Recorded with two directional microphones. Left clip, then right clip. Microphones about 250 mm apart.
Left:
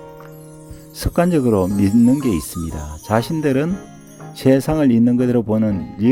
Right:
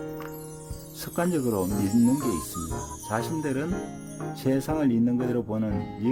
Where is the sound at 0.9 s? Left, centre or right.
Left.